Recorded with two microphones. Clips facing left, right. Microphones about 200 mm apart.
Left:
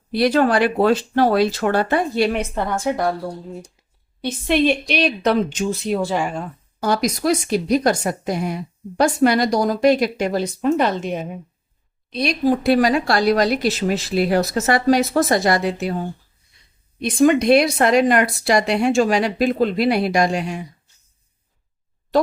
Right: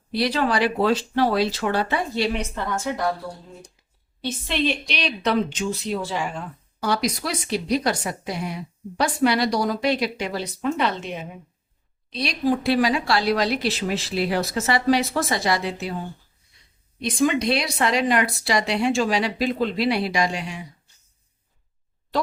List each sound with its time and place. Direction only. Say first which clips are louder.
0.1 s a woman's voice: left 6 dB; 50° left (ahead or behind)
4.2 s a woman's voice: left 7 dB; 50° left (ahead or behind)
17.0 s a woman's voice: left 6 dB; 50° left (ahead or behind)